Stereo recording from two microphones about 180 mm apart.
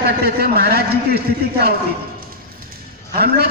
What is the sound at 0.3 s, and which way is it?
Speech, 60° right (ahead or behind).